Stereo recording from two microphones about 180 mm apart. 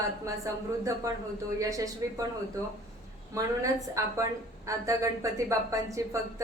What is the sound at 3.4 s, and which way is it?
Speech, 15° right (ahead or behind).